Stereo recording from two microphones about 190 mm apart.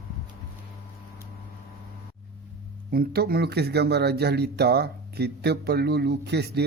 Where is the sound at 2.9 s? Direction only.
55° right (ahead or behind).